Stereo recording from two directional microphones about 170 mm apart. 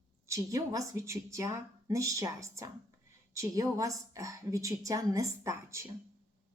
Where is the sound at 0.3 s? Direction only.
20° right (ahead or behind).